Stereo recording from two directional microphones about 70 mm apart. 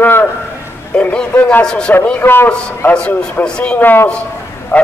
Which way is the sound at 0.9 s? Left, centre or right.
Centre.